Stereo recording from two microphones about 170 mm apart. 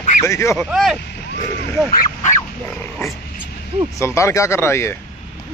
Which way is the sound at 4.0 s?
15° left (ahead or behind).